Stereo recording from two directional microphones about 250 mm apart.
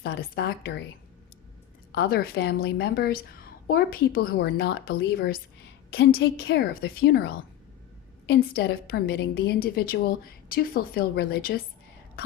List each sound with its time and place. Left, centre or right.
0.0 s a woman's voice: left
2.0 s a woman's voice: left
8.3 s a woman's voice: left